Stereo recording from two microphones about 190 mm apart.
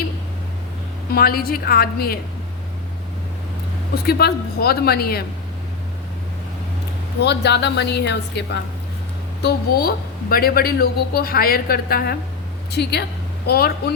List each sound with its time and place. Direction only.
1.1 s a woman's voice: 50° left (ahead or behind)
4.0 s a woman's voice: 55° left (ahead or behind)
7.2 s a woman's voice: 60° left (ahead or behind)
9.4 s a woman's voice: 55° left (ahead or behind)